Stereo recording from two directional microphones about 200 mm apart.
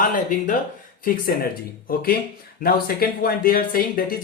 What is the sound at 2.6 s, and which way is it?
Speech, 50° left (ahead or behind).